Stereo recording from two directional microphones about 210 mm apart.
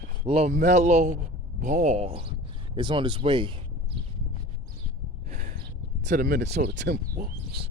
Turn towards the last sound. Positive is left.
turn(degrees=-50)  # may be behind; listen again after turning